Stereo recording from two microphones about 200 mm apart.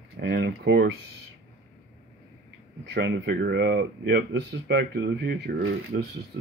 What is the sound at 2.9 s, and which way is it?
Speech, 60° right (ahead or behind).